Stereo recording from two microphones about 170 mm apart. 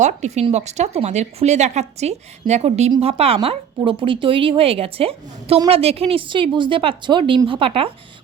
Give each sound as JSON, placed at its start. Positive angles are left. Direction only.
{"t": 0.0, "sound": "a woman's voice", "side_deg": -45}